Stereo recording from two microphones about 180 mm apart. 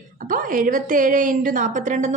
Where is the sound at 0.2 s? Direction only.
50° right (ahead or behind).